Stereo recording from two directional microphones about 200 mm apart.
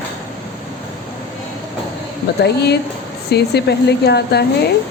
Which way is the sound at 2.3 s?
55° left (ahead or behind).